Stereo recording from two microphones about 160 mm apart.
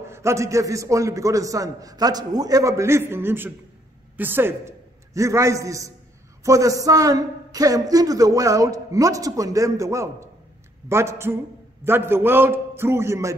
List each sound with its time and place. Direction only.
0.0 s a man's voice: 15° right (ahead or behind)